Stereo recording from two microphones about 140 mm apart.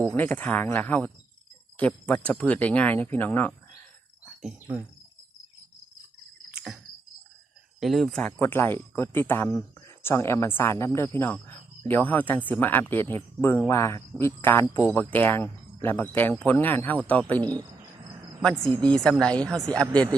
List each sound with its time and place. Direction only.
0.2 s speech: 10° left (ahead or behind)
4.4 s speech: 10° right (ahead or behind)
7.8 s speech: centre (ahead or behind)
8.4 s speech: 15° left (ahead or behind)
17.3 s speech: 30° right (ahead or behind)
18.9 s speech: 5° left (ahead or behind)